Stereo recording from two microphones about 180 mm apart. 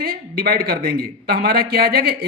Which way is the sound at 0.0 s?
55° right (ahead or behind).